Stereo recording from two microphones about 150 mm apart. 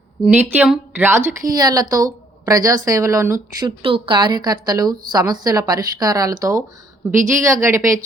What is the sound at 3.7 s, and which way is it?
A woman's voice, 35° right (ahead or behind).